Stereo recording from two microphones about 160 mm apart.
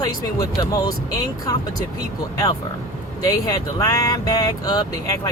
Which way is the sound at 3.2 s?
20° left (ahead or behind).